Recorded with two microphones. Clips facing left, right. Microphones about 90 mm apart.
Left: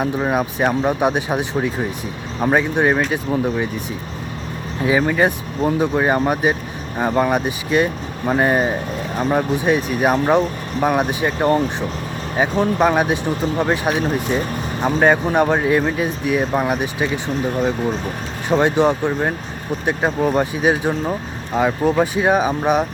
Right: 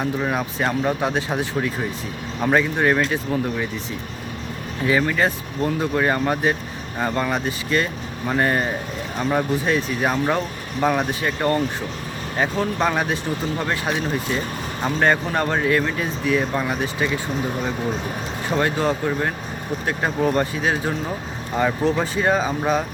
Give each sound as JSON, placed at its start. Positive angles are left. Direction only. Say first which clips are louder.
{"t": 0.0, "sound": "speech", "louder": "left 4 dB", "side_deg": 25}
{"t": 4.8, "sound": "speech", "louder": "left 3 dB", "side_deg": 20}
{"t": 18.4, "sound": "speech", "louder": "left 6 dB", "side_deg": 20}